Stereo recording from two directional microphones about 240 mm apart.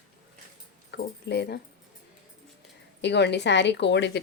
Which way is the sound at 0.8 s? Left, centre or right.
Left.